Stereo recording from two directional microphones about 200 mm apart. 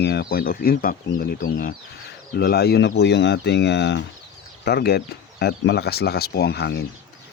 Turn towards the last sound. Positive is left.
turn(degrees=55)  # may be behind; listen again after turning